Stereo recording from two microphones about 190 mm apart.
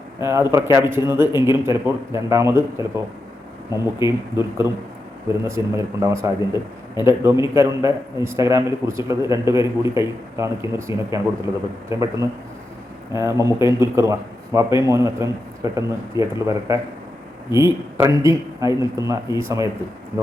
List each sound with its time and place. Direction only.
0.2 s a man's voice: 15° right (ahead or behind)